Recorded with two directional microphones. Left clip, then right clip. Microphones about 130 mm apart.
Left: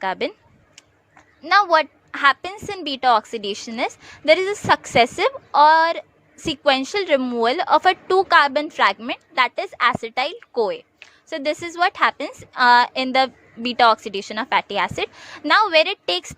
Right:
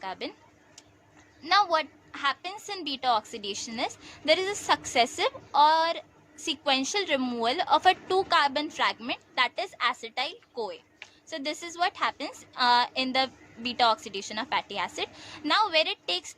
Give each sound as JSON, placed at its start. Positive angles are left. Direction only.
{"t": 0.0, "sound": "a woman's voice", "side_deg": 65}
{"t": 1.5, "sound": "a woman's voice", "side_deg": 50}